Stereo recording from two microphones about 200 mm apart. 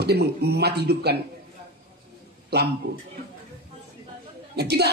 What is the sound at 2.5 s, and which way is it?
Speech, 55° right (ahead or behind).